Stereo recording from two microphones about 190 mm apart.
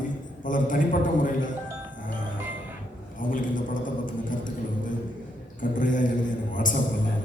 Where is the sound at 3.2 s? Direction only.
45° left (ahead or behind).